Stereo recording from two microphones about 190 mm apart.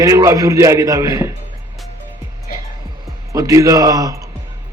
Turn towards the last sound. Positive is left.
turn(degrees=-20)  # may be behind; listen again after turning